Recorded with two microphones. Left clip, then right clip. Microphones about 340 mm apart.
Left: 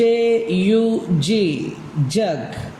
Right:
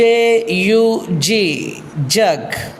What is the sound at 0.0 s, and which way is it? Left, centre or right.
Music, centre.